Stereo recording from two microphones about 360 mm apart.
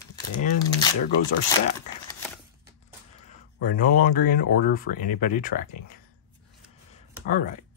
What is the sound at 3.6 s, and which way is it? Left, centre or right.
Speech, left.